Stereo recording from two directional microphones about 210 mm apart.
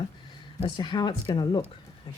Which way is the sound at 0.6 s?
20° left (ahead or behind).